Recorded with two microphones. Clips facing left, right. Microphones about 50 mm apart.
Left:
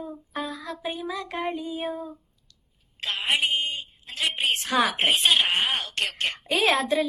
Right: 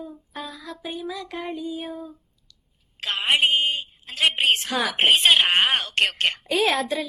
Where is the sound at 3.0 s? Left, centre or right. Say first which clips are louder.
Right 4 dB; right.